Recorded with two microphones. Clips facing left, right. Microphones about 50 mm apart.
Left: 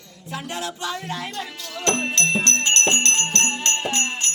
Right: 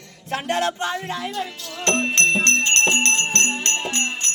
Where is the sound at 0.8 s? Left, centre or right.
Right.